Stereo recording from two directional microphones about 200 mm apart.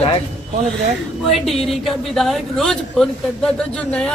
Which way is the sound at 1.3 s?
Centre (ahead or behind).